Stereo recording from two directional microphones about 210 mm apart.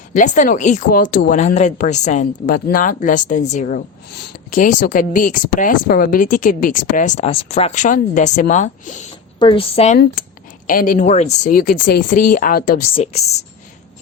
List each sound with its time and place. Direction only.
0.1 s speech: 35° left (ahead or behind)
9.4 s a woman's voice: 25° left (ahead or behind)
10.7 s speech: 40° left (ahead or behind)
12.9 s speech: 30° left (ahead or behind)